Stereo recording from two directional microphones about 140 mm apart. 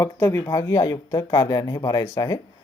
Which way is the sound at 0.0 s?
20° left (ahead or behind).